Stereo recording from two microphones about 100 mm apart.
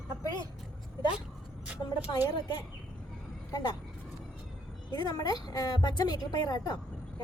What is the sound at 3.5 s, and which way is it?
Speech, 40° left (ahead or behind).